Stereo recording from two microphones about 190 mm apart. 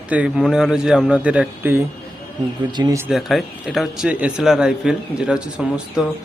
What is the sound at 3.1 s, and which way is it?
Speech, centre (ahead or behind).